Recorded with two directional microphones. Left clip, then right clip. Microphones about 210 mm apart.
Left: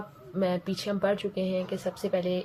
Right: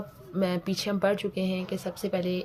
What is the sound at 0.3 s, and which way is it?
Speech, 25° right (ahead or behind).